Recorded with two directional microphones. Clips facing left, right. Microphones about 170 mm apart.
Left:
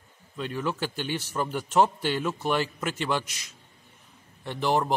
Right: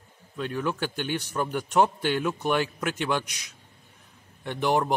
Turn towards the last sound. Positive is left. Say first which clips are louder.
# right 1 dB
turn(degrees=0)  # may be behind; listen again after turning